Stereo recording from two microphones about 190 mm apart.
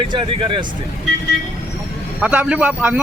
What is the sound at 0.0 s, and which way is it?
Speech, 25° right (ahead or behind).